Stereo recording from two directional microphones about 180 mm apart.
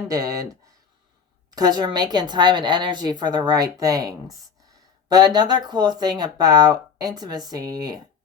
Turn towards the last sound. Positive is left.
turn(degrees=-20)  # may be behind; listen again after turning